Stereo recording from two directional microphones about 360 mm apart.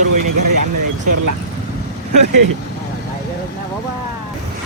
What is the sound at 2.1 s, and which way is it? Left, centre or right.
Speech, right.